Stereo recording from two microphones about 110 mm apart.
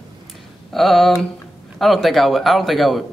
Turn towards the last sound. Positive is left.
turn(degrees=0)  # may be behind; listen again after turning